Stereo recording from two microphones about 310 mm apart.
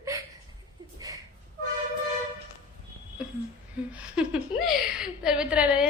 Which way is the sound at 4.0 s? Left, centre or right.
Centre.